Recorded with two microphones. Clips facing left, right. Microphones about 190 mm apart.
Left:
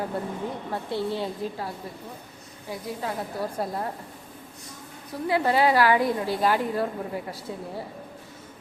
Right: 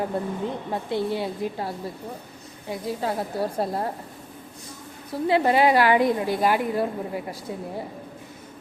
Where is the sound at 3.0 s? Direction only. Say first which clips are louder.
Right 4 dB; 30° right (ahead or behind).